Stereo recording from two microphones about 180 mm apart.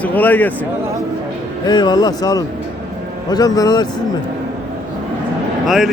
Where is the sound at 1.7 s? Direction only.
25° left (ahead or behind).